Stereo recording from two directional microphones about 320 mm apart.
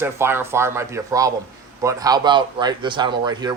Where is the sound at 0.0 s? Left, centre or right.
Centre.